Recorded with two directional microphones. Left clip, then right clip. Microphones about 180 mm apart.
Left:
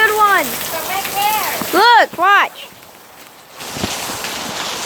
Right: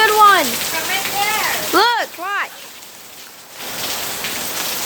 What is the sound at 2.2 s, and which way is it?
Speech, 30° left (ahead or behind).